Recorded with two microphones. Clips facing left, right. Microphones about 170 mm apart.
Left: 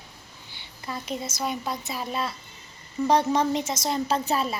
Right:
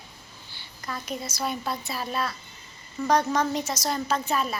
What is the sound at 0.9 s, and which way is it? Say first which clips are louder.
A woman's voice: left 1 dB; 25° left (ahead or behind).